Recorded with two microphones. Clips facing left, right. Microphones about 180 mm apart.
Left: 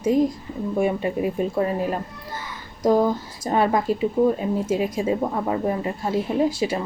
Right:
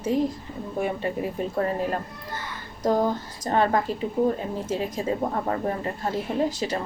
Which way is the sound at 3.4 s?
10° left (ahead or behind).